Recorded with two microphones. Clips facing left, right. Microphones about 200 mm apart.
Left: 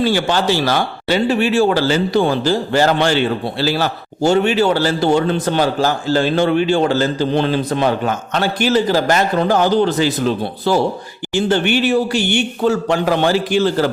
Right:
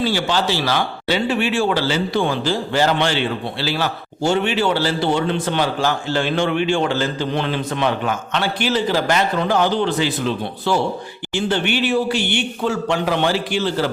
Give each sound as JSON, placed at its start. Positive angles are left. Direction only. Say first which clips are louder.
{"t": 0.0, "sound": "a man's voice", "louder": "left 4 dB", "side_deg": 50}